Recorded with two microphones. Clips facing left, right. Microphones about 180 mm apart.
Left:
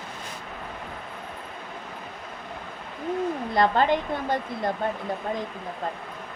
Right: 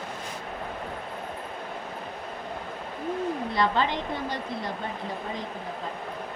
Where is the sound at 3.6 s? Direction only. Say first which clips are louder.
Left 5 dB; 50° left (ahead or behind).